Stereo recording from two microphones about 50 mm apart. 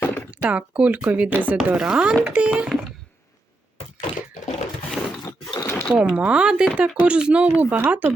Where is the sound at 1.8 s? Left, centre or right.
Centre.